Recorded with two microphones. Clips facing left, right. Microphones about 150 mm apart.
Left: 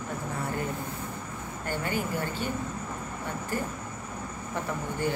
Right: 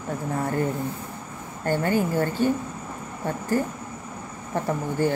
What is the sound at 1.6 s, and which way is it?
Speech, 50° right (ahead or behind).